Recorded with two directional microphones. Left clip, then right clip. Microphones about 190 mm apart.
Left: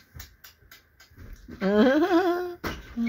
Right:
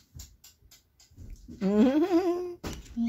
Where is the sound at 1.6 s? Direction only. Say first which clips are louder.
Left 4 dB; 50° right (ahead or behind).